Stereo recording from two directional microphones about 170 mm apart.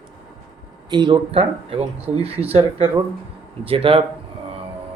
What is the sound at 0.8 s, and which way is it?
Speech, 25° right (ahead or behind).